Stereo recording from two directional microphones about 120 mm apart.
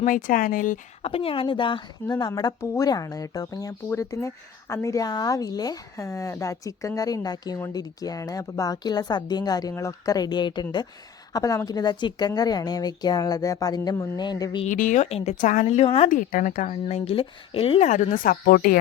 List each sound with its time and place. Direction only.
0.0 s speech: 90° left
1.0 s speech: 50° left (ahead or behind)
2.1 s speech: 30° left (ahead or behind)
14.6 s a woman's voice: 90° left; by 16.0 s 60° left (ahead or behind)
16.0 s speech: 90° left
16.9 s speech: 50° left (ahead or behind)
17.8 s speech: 90° left